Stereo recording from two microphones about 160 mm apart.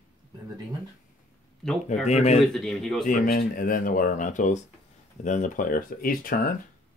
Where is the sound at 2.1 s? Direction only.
40° left (ahead or behind).